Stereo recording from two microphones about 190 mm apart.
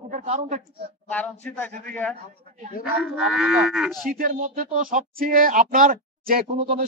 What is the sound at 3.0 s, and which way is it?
Cattle, 5° right (ahead or behind).